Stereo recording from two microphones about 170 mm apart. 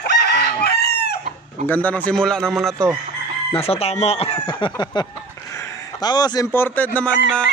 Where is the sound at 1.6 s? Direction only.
10° left (ahead or behind).